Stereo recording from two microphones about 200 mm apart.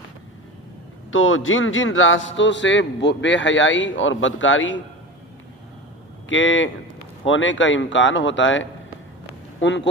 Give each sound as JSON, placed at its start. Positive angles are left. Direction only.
{"t": 1.1, "sound": "a man's voice", "side_deg": 80}
{"t": 6.2, "sound": "a man's voice", "side_deg": 70}